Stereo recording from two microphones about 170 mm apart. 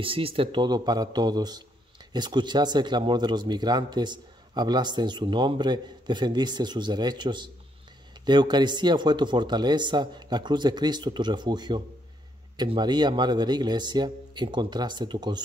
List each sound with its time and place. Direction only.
0.0 s speech: 30° right (ahead or behind)